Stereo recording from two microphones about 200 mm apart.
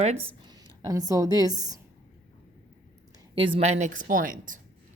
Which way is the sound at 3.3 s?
25° right (ahead or behind).